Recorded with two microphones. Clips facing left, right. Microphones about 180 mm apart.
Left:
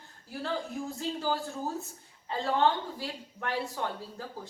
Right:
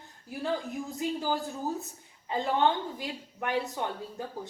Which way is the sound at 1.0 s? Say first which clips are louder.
Right 2 dB; 15° right (ahead or behind).